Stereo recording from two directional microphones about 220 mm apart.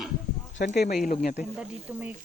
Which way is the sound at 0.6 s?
45° left (ahead or behind).